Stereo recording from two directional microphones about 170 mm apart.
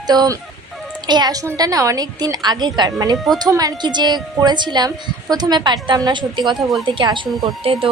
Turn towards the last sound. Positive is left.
turn(degrees=-35)  # may be behind; listen again after turning